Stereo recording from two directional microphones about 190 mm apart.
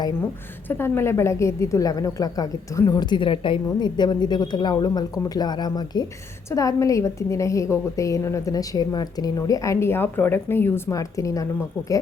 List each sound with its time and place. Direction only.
0.7 s a woman's voice: 10° left (ahead or behind)